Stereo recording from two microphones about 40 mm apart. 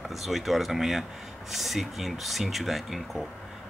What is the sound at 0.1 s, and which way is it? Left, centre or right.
Speech, centre.